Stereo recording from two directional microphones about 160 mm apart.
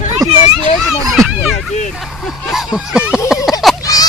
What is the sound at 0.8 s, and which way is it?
Children playing, centre (ahead or behind).